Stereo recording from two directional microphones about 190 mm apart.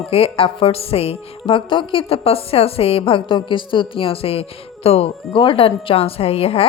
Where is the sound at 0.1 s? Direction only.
30° left (ahead or behind).